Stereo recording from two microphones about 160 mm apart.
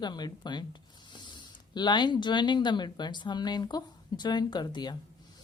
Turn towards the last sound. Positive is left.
turn(degrees=25)  # may be behind; listen again after turning